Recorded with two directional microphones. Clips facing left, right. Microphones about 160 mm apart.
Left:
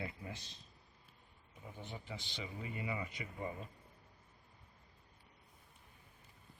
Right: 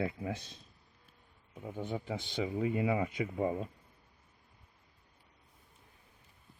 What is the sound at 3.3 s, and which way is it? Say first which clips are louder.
Speech: right 10 dB; 75° right (ahead or behind).